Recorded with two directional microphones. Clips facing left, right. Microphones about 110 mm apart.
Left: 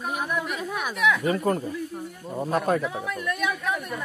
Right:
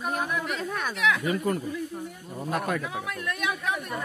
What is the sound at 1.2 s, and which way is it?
Speech, 35° left (ahead or behind).